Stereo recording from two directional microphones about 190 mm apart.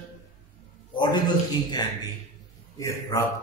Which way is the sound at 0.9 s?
25° left (ahead or behind).